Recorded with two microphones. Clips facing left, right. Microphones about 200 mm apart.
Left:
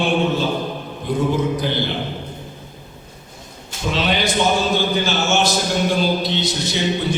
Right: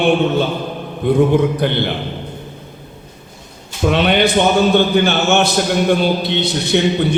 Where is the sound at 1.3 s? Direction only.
60° right (ahead or behind).